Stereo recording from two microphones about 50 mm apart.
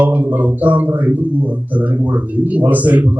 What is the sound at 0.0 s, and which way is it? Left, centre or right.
Speech, right.